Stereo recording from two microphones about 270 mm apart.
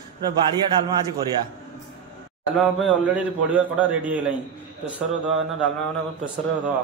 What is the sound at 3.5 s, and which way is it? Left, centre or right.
Speech, centre.